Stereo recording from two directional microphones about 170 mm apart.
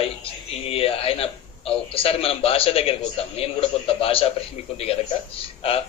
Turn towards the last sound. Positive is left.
turn(degrees=35)  # may be behind; listen again after turning